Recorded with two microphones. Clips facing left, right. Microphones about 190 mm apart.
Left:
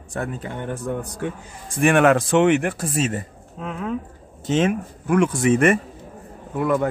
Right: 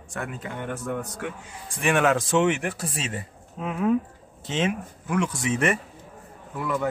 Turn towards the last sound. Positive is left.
turn(degrees=55)  # may be behind; listen again after turning